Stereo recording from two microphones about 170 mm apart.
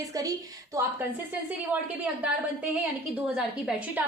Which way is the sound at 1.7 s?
10° right (ahead or behind).